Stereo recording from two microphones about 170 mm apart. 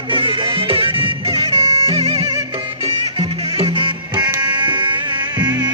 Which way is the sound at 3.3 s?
35° right (ahead or behind).